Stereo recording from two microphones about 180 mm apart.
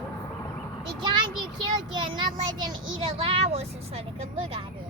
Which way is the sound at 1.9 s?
25° right (ahead or behind).